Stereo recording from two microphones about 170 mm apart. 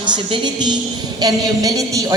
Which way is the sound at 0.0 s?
25° right (ahead or behind).